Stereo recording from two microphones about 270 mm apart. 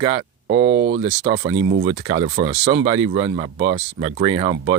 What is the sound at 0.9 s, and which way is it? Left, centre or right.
Speech, centre.